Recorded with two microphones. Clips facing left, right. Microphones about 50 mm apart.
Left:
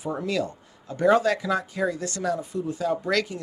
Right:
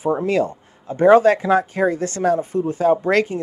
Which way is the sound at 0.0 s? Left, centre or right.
Right.